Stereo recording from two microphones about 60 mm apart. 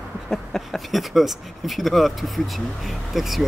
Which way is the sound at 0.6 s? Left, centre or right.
Centre.